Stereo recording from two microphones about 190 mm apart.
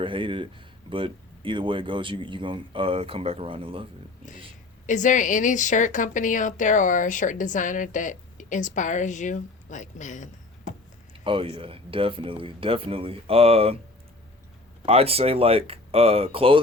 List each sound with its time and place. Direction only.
0.0 s speech: 25° right (ahead or behind)
4.9 s a woman's voice: 40° left (ahead or behind)
11.1 s speech: 25° right (ahead or behind)
14.8 s speech: 30° right (ahead or behind)